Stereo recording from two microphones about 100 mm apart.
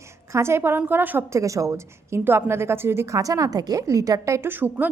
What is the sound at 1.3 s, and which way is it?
A woman's voice, 30° right (ahead or behind).